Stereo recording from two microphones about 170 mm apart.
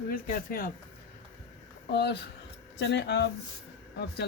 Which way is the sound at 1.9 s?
75° left (ahead or behind).